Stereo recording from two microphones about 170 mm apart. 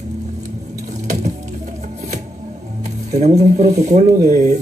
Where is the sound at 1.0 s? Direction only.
40° right (ahead or behind).